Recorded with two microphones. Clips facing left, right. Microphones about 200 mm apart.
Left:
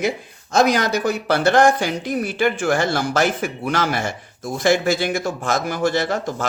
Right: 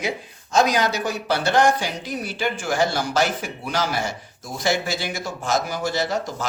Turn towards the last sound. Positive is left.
turn(degrees=55)  # may be behind; listen again after turning